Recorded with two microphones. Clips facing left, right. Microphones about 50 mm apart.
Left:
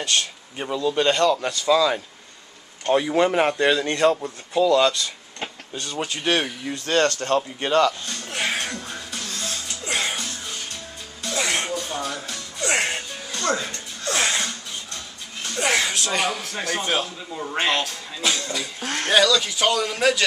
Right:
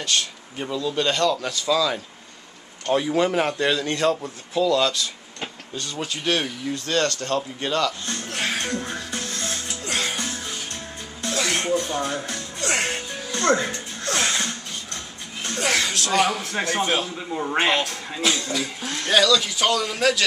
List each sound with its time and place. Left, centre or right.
0.0 s speech: centre
6.3 s speech: left
8.3 s music: centre
9.1 s music: right
9.8 s music: centre
11.3 s music: centre
13.4 s music: right
14.0 s a sound: centre
15.5 s a man's voice: centre
17.1 s a man's voice: right
18.2 s a man's voice: centre
19.0 s a man's voice: centre